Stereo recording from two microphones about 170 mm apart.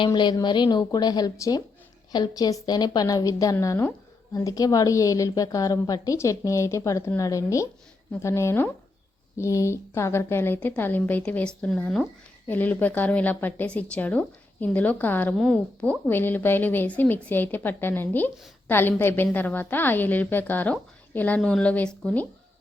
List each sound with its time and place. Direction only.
0.0 s a woman's voice: 25° left (ahead or behind); by 22.3 s 5° left (ahead or behind)